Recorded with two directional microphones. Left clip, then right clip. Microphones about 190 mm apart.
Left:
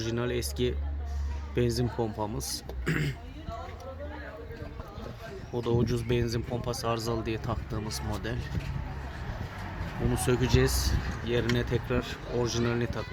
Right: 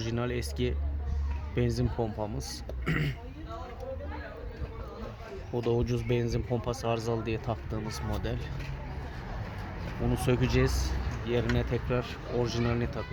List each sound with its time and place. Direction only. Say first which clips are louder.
0.0 s speech: left 2 dB; 5° left (ahead or behind)
5.5 s speech: even; 15° left (ahead or behind)
10.2 s speech: left 2 dB; 5° left (ahead or behind)